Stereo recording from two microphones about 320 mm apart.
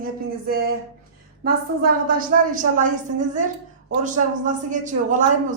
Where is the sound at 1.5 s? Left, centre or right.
Right.